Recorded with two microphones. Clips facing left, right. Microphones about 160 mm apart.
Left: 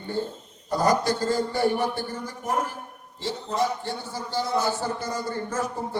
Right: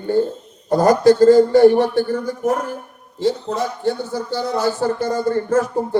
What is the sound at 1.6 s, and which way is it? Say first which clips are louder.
Speech: right 12 dB; 80° right.